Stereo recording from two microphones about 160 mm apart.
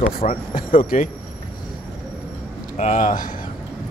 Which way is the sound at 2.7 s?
50° left (ahead or behind).